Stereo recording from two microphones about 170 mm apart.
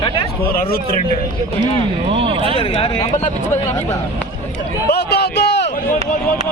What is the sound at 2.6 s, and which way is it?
Speech, 30° left (ahead or behind).